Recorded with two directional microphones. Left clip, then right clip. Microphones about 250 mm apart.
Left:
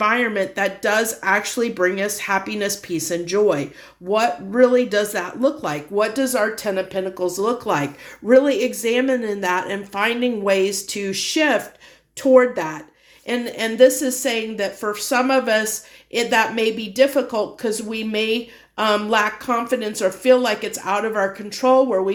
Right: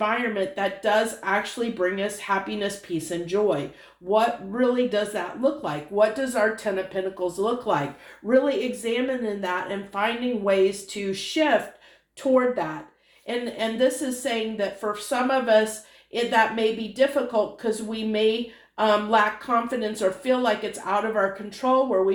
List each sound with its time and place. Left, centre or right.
0.0 s speech: left